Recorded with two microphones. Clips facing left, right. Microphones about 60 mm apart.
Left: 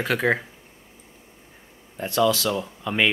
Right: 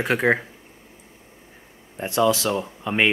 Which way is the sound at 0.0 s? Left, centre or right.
Right.